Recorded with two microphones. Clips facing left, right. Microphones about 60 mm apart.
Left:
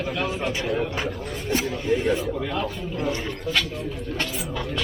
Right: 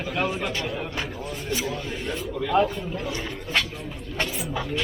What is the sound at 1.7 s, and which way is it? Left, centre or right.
Speech, centre.